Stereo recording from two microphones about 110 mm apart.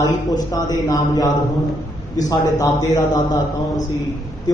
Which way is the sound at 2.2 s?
25° left (ahead or behind).